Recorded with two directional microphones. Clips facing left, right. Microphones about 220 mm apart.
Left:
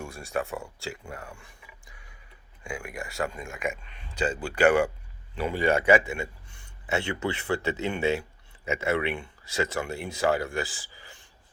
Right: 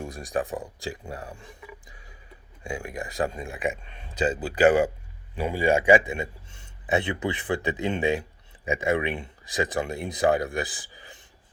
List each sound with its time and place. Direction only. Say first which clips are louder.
0.1 s a man's voice: right 2 dB; 15° right (ahead or behind)
0.9 s speech: right 3 dB; 35° right (ahead or behind)
1.9 s a sound: right 4 dB; 20° right (ahead or behind)
2.6 s speech: right 3 dB; 40° right (ahead or behind)
2.9 s speech: right 4 dB; 20° right (ahead or behind)
3.2 s speech: right 3 dB; 35° right (ahead or behind)
4.1 s a man's voice: right 3 dB; 20° right (ahead or behind)